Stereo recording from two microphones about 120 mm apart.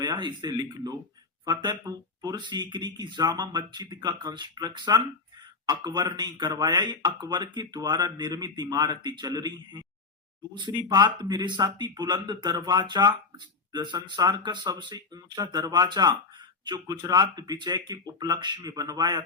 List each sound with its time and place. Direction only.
0.0 s speech: 40° right (ahead or behind)